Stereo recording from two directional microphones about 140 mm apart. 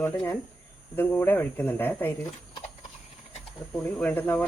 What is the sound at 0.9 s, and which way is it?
Speech, 15° left (ahead or behind).